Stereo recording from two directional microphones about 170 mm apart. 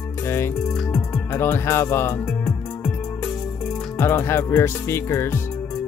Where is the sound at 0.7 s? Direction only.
Centre (ahead or behind).